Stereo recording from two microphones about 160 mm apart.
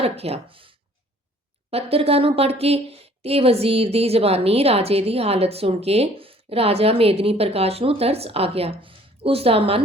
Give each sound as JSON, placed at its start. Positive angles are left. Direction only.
{"t": 0.0, "sound": "a woman's voice", "side_deg": -40}